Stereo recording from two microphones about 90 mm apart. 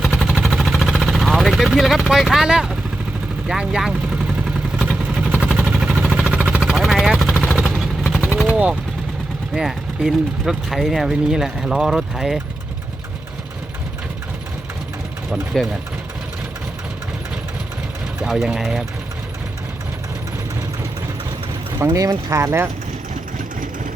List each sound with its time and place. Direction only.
0.0 s vehicle: 5° right (ahead or behind)
3.4 s speech: 5° right (ahead or behind)
5.1 s vehicle: 10° right (ahead or behind)
9.6 s speech: 5° right (ahead or behind)
15.5 s speech: 5° left (ahead or behind)
18.2 s speech: 5° right (ahead or behind)
21.9 s speech: 40° right (ahead or behind)